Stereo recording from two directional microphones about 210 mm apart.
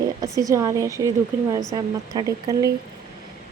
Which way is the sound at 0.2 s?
15° right (ahead or behind).